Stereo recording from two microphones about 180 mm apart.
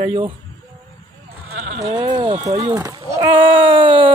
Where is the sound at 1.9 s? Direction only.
25° right (ahead or behind).